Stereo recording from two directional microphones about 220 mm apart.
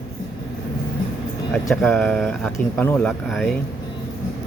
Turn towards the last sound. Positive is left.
turn(degrees=0)  # may be behind; listen again after turning